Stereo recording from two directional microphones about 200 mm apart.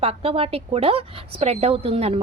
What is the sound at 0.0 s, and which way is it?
A woman's voice, 30° right (ahead or behind).